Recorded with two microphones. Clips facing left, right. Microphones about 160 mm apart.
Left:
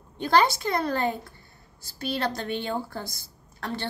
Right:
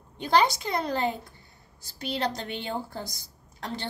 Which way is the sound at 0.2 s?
15° right (ahead or behind).